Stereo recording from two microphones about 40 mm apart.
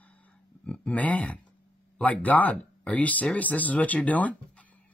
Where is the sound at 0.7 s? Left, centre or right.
Left.